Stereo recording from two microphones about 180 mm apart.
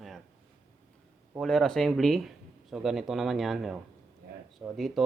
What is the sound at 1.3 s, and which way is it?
Speech, centre (ahead or behind).